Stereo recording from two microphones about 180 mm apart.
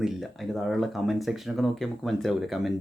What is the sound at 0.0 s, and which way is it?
Speech, centre (ahead or behind).